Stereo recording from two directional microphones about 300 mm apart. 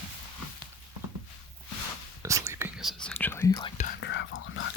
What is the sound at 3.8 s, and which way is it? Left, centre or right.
Whispering, left.